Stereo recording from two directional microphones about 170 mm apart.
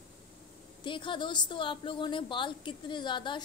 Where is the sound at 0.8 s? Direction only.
30° left (ahead or behind).